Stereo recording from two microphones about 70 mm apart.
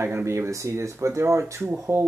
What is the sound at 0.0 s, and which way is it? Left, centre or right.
Speech, right.